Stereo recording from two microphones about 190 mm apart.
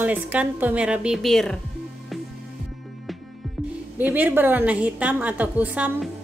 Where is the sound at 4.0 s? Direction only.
10° right (ahead or behind).